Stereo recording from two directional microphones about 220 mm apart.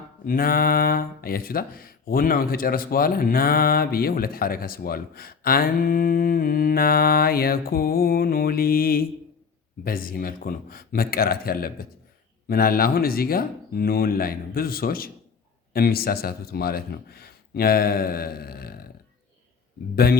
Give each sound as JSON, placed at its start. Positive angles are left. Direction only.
{"t": 0.3, "sound": "speech", "side_deg": 40}